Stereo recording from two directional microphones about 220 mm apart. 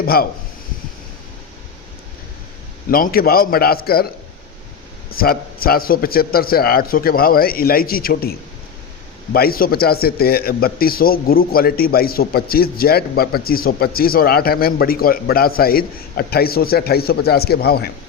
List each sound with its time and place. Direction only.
0.0 s speech: 45° left (ahead or behind)
2.9 s speech: 40° left (ahead or behind)
5.1 s speech: 45° left (ahead or behind)